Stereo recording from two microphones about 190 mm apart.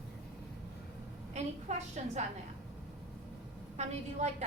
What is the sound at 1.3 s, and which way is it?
Speech, 35° right (ahead or behind).